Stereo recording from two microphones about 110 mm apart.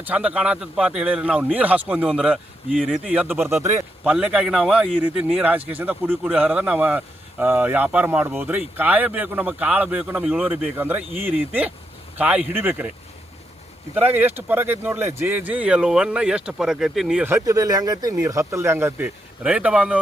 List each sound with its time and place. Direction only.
0.0 s speech: 10° right (ahead or behind)
2.6 s speech: centre (ahead or behind)
3.1 s speech: 15° right (ahead or behind)
3.4 s a man's voice: 25° right (ahead or behind)
4.0 s speech: 10° right (ahead or behind)
13.9 s speech: 15° right (ahead or behind)
17.2 s speech: 30° right (ahead or behind); by 20.0 s 10° right (ahead or behind)